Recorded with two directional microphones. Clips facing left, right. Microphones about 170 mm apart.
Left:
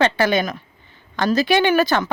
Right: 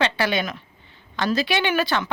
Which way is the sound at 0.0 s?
45° left (ahead or behind).